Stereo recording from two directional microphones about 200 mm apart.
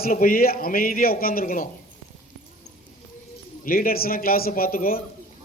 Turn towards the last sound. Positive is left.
turn(degrees=45)  # may be behind; listen again after turning